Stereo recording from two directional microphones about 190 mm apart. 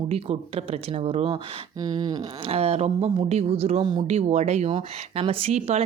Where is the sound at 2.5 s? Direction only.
35° right (ahead or behind).